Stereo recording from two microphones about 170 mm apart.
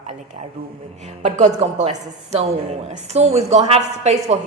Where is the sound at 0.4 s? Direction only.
30° right (ahead or behind).